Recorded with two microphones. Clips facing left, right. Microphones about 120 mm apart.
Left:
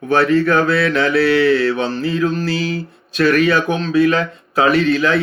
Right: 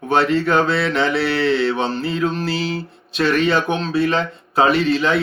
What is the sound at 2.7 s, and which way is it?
Speech, 25° right (ahead or behind).